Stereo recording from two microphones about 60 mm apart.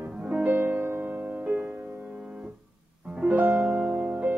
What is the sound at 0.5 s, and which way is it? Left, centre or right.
Music, right.